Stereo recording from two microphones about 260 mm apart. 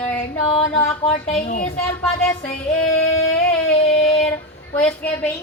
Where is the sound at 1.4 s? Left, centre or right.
Left.